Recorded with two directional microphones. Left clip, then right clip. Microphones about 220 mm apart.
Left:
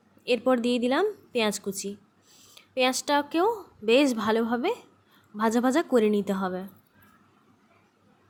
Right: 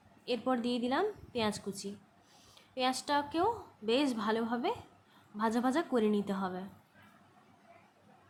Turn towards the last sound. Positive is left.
turn(degrees=25)  # may be behind; listen again after turning